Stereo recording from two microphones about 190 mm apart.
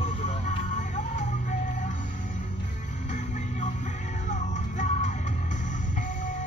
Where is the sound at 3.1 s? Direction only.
40° left (ahead or behind).